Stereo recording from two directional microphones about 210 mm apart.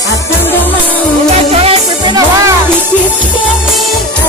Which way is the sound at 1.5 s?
30° right (ahead or behind).